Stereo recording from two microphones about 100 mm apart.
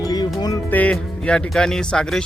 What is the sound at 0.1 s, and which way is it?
Music, 45° left (ahead or behind).